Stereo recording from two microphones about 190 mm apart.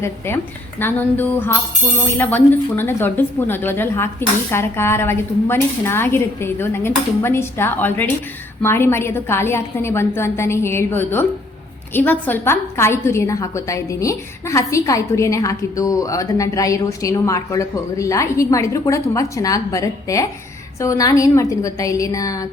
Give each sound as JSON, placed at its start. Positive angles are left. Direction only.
{"t": 0.8, "sound": "a woman's voice", "side_deg": 10}